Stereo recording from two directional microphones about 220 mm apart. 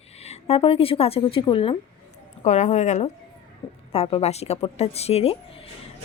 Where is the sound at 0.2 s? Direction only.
30° left (ahead or behind).